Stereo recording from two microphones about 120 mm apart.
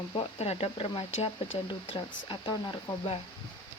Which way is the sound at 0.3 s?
55° left (ahead or behind).